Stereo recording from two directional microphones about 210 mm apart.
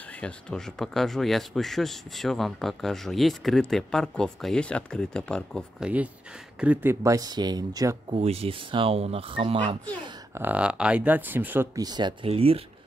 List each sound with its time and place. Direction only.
0.2 s speech: 5° left (ahead or behind)
6.6 s speech: 10° right (ahead or behind)
8.2 s speech: 30° right (ahead or behind)
9.8 s speech: 10° right (ahead or behind); by 12.6 s 25° right (ahead or behind)